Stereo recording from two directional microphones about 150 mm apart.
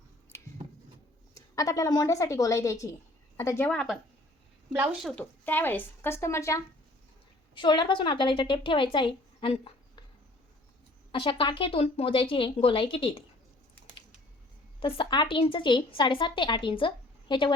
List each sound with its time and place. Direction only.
1.3 s a woman's voice: 25° left (ahead or behind)
3.7 s a woman's voice: 5° left (ahead or behind)
5.0 s a woman's voice: 10° left (ahead or behind)
7.5 s a woman's voice: 30° left (ahead or behind)
11.1 s a woman's voice: 35° left (ahead or behind)
14.8 s a woman's voice: 35° left (ahead or behind)